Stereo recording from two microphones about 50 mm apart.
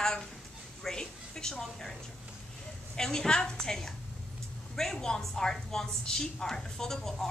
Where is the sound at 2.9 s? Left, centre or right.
Centre.